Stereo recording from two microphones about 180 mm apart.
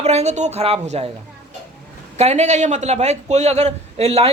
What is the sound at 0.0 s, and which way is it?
A man's voice, 35° right (ahead or behind).